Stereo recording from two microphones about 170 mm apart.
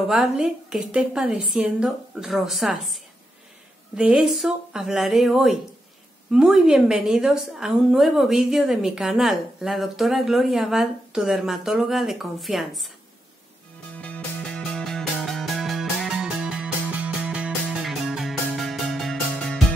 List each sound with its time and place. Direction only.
0.1 s a woman's voice: 5° right (ahead or behind)
13.9 s music: 10° left (ahead or behind)